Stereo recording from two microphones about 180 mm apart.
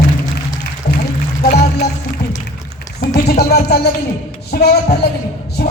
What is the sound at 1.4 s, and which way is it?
Music, 60° left (ahead or behind).